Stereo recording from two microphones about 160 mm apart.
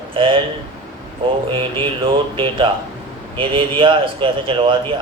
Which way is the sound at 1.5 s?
35° right (ahead or behind).